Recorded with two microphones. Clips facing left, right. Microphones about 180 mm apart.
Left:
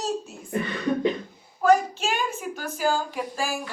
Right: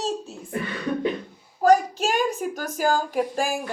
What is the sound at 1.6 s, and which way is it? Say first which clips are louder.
Speech: right 2 dB; 40° right (ahead or behind).